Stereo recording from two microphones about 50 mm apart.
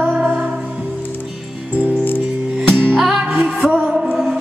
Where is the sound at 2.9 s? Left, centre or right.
Centre.